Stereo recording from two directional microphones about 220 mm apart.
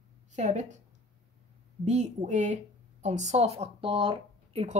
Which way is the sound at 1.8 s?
30° right (ahead or behind).